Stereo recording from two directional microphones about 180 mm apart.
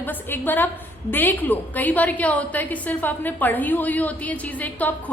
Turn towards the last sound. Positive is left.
turn(degrees=10)  # may be behind; listen again after turning